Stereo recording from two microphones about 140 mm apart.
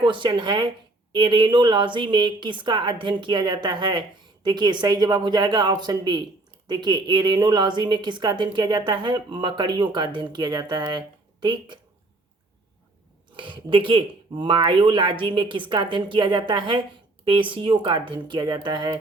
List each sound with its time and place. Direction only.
0.0 s speech: 35° right (ahead or behind)
13.3 s speech: 35° right (ahead or behind)